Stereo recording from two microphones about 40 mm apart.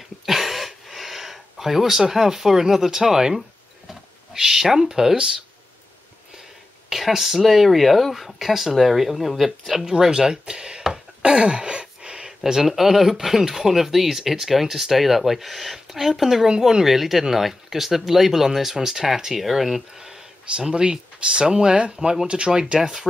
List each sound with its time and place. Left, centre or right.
0.2 s a sound: centre
5.1 s speech: centre
6.9 s speech: centre
9.8 s speech: centre
11.2 s a sound: right
12.3 s speech: centre